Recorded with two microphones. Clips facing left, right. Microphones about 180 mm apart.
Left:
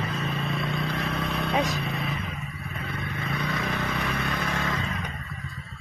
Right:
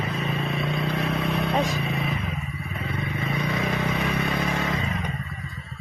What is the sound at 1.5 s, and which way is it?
Vehicle, 10° right (ahead or behind).